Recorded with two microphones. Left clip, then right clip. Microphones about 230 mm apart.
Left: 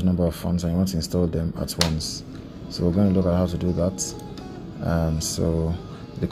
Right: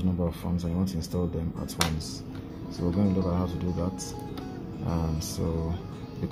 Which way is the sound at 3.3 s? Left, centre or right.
Left.